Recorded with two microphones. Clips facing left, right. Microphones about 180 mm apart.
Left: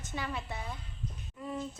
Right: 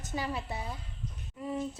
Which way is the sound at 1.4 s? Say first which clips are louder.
Right 3 dB; 20° right (ahead or behind).